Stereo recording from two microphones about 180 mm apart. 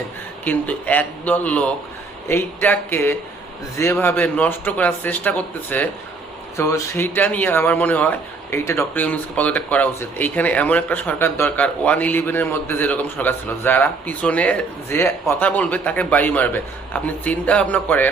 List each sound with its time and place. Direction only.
0.4 s speech: 10° left (ahead or behind)